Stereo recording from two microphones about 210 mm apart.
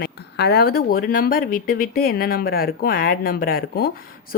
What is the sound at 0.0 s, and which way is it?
Speech, 50° left (ahead or behind).